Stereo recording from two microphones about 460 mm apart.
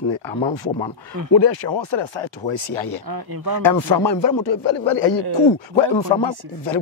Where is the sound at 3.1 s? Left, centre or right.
Right.